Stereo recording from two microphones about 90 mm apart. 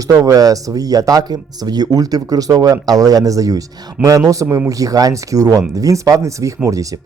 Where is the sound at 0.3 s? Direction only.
40° right (ahead or behind).